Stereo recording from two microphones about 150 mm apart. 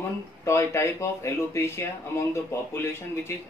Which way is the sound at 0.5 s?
20° left (ahead or behind).